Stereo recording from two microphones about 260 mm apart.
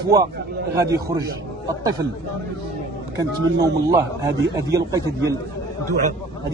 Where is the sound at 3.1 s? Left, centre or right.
Centre.